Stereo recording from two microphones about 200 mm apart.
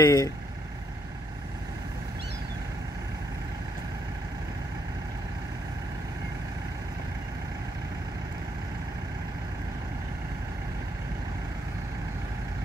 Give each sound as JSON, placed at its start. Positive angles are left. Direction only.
{"t": 0.0, "sound": "speech", "side_deg": 20}